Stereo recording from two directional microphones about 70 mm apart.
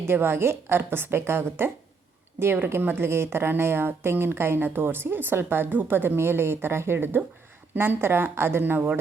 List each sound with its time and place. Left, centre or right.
0.0 s a woman's voice: right